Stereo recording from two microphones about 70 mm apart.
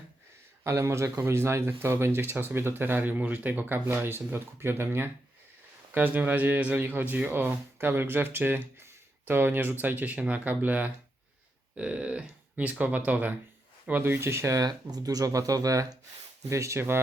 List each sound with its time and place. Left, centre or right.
0.6 s speech: right
14.0 s speech: right
14.6 s speech: right